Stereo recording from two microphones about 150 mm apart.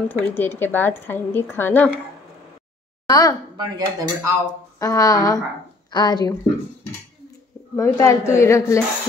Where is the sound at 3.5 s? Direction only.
25° right (ahead or behind).